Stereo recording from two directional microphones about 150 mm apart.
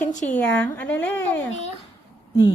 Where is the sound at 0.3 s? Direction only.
10° left (ahead or behind).